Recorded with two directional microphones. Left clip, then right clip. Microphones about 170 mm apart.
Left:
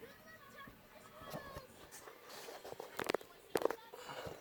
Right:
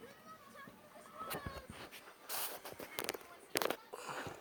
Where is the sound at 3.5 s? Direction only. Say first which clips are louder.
Left 1 dB; 60° right (ahead or behind).